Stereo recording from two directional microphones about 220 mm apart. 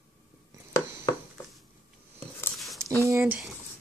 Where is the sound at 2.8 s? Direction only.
15° right (ahead or behind).